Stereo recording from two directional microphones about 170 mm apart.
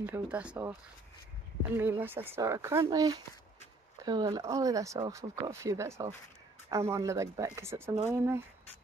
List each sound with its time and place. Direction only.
0.0 s speech: 10° right (ahead or behind)
1.8 s speech: 10° right (ahead or behind)